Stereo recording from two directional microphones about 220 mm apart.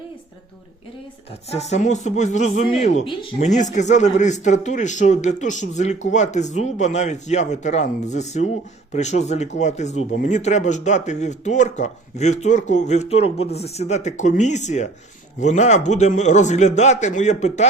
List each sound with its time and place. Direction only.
1.5 s speech: 30° left (ahead or behind)